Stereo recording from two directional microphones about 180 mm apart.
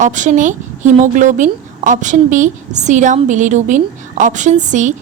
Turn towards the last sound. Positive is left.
turn(degrees=-45)  # may be behind; listen again after turning